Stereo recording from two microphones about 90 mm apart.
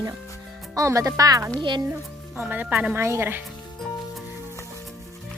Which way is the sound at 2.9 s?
30° right (ahead or behind).